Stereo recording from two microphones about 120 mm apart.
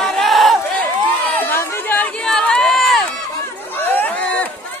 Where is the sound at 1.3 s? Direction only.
20° left (ahead or behind); by 3.0 s centre (ahead or behind).